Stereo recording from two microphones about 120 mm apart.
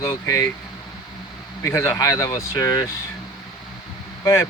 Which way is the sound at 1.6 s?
20° left (ahead or behind).